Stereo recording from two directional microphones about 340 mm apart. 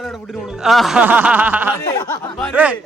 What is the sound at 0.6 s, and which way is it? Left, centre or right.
Speech, centre.